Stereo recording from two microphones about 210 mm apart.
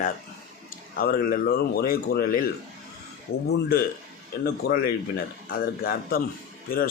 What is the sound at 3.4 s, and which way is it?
A man's voice, 50° left (ahead or behind).